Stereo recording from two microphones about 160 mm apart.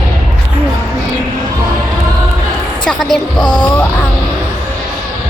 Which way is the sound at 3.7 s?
10° left (ahead or behind).